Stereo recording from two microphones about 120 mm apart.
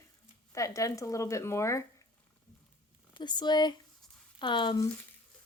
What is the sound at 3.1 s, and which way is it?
Speech, 35° left (ahead or behind).